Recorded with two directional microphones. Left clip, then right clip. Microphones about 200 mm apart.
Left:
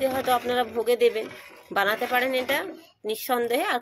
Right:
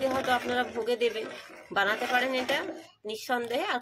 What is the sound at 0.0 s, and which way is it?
A woman's voice, 35° left (ahead or behind).